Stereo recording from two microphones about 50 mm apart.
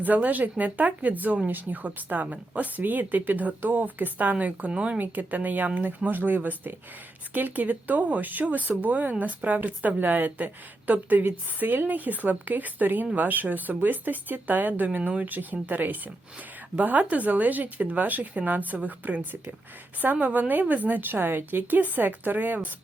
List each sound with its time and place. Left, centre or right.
0.0 s speech: right
4.9 s speech: right